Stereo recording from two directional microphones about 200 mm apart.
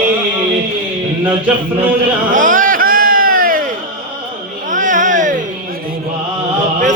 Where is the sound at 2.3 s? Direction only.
40° right (ahead or behind).